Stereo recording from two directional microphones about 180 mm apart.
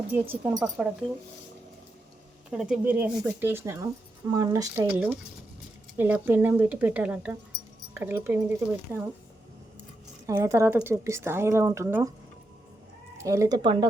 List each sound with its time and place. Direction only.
0.1 s speech: 10° right (ahead or behind)
2.5 s speech: 5° right (ahead or behind)
4.9 s speech: 10° right (ahead or behind)
10.2 s speech: 15° right (ahead or behind)
13.1 s speech: 15° right (ahead or behind)